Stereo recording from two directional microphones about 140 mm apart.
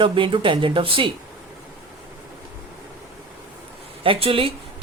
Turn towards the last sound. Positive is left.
turn(degrees=-40)  # may be behind; listen again after turning